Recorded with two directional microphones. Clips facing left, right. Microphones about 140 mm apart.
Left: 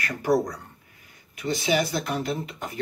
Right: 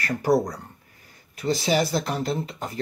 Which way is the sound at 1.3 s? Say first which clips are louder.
Right 2 dB; 35° right (ahead or behind).